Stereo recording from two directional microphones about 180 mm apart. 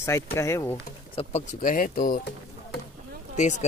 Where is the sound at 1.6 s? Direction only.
50° left (ahead or behind).